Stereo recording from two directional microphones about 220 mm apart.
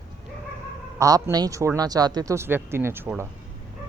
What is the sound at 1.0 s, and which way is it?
Speech, 15° right (ahead or behind).